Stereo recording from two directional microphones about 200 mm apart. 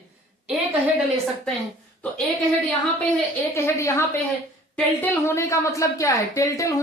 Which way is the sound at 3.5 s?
15° left (ahead or behind).